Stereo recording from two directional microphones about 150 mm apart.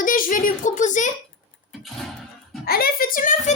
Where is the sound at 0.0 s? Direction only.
65° left (ahead or behind).